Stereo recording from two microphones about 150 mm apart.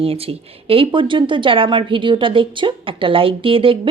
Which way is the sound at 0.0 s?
40° right (ahead or behind).